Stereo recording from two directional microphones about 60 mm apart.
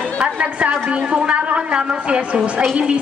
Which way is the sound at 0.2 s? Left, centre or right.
Centre.